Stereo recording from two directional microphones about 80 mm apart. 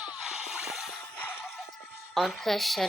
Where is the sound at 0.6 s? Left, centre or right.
Centre.